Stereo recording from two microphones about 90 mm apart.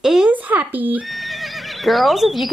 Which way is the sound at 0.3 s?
15° right (ahead or behind).